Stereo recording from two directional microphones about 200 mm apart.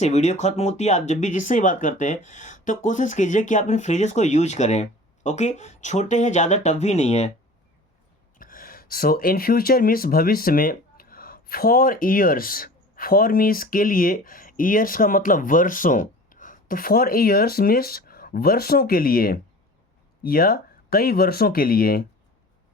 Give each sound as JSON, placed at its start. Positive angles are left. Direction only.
{"t": 0.0, "sound": "speech", "side_deg": 35}
{"t": 8.4, "sound": "speech", "side_deg": 45}